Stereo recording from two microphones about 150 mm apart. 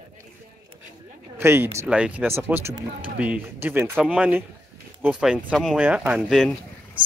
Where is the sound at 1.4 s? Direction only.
15° right (ahead or behind).